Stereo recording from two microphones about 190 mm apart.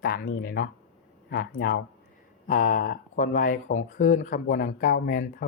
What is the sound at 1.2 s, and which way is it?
Speech, 60° left (ahead or behind).